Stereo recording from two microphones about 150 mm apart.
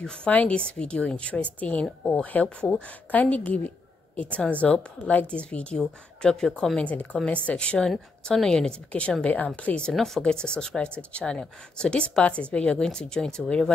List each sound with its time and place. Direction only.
0.0 s a woman's voice: 10° left (ahead or behind)